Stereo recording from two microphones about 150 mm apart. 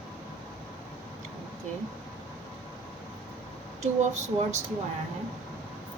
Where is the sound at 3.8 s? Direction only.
50° right (ahead or behind).